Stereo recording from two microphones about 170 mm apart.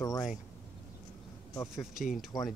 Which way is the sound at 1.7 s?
Centre (ahead or behind).